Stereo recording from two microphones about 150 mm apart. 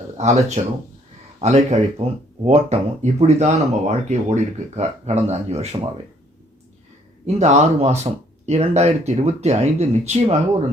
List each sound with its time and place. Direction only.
0.2 s speech: 50° right (ahead or behind)
7.3 s speech: 50° right (ahead or behind)